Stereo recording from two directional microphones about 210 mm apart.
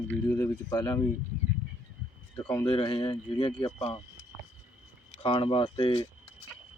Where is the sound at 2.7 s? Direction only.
25° left (ahead or behind).